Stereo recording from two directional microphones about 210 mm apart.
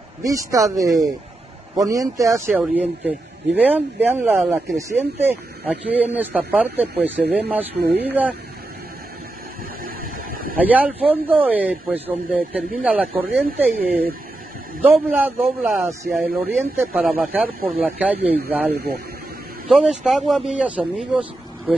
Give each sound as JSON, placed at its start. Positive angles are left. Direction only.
{"t": 0.2, "sound": "speech", "side_deg": -15}
{"t": 10.6, "sound": "speech", "side_deg": -5}